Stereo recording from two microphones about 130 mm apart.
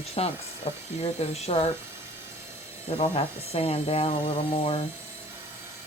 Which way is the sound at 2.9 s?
50° left (ahead or behind).